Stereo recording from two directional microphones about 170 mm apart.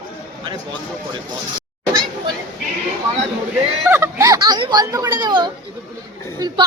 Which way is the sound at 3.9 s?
15° right (ahead or behind).